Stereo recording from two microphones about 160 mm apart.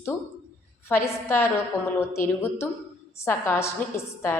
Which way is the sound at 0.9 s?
15° left (ahead or behind).